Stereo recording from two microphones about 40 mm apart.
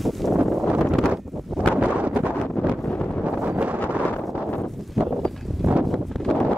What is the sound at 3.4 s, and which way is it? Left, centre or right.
Wind noise, right.